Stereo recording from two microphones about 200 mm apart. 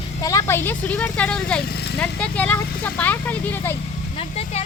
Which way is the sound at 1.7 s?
55° left (ahead or behind).